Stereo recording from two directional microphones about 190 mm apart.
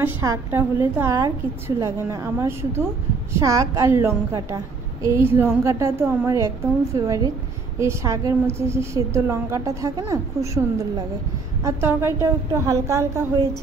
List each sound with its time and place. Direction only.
0.0 s a woman's voice: 15° right (ahead or behind)